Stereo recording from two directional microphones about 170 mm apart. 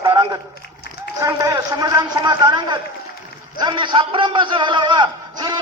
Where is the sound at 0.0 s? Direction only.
25° right (ahead or behind).